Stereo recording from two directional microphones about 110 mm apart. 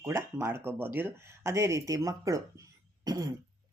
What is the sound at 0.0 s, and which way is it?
Speech, 25° right (ahead or behind).